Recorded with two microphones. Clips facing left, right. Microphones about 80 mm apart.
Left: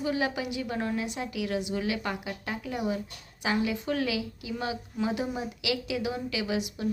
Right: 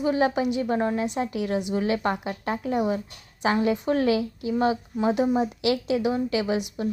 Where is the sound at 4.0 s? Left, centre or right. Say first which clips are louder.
Right 8 dB; right.